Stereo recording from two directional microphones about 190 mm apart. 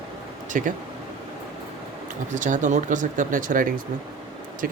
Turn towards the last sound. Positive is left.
turn(degrees=-50)  # may be behind; listen again after turning